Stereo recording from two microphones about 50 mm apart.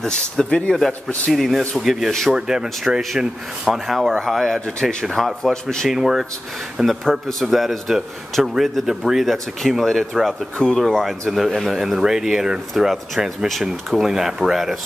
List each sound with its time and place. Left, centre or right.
0.0 s a man's voice: centre
2.3 s a man's voice: centre
5.9 s a man's voice: centre
7.1 s a man's voice: centre